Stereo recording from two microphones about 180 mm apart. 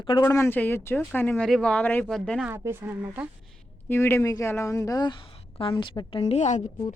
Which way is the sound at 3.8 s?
15° left (ahead or behind).